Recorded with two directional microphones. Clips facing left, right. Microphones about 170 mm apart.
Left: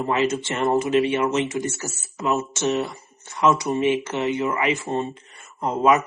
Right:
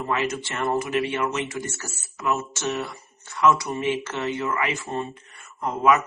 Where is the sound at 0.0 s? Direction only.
25° left (ahead or behind).